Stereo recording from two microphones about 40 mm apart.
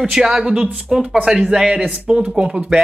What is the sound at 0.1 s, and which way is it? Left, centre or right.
Speech, centre.